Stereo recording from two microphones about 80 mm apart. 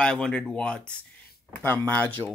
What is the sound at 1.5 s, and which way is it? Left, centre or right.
Speech, left.